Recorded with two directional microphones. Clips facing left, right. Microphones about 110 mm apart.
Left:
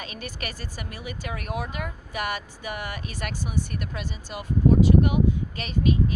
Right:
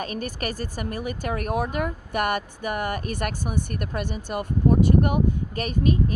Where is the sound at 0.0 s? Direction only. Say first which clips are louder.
Right 7 dB; 45° right (ahead or behind).